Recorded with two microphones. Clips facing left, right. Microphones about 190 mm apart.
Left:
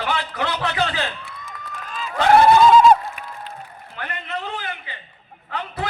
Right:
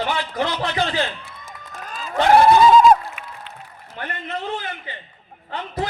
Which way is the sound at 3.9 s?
40° right (ahead or behind).